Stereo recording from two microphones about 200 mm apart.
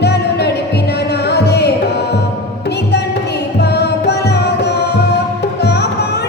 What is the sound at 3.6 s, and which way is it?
Music, 55° left (ahead or behind).